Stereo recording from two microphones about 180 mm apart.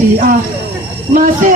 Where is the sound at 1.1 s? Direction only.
45° right (ahead or behind).